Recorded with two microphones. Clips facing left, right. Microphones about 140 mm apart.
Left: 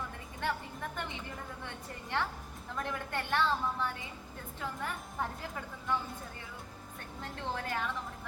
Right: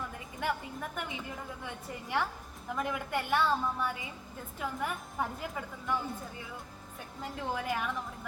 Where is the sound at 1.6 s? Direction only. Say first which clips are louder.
Right 2 dB; 10° right (ahead or behind).